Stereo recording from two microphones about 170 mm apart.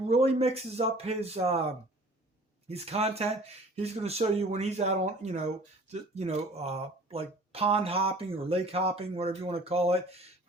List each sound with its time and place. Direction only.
0.1 s speech: 40° right (ahead or behind)